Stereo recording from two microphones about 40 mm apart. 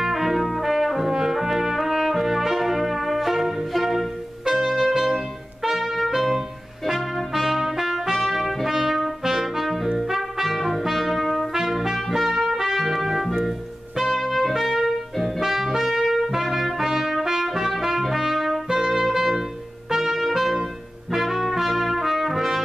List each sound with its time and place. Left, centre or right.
0.0 s trumpet: centre
19.9 s music: centre
21.1 s trumpet: centre